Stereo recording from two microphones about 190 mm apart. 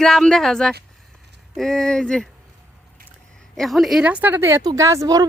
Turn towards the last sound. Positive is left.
turn(degrees=-20)  # may be behind; listen again after turning